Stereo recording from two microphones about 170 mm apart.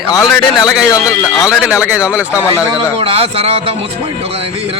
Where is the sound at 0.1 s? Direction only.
20° left (ahead or behind).